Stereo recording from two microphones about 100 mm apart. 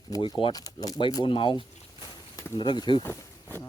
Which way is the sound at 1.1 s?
55° left (ahead or behind).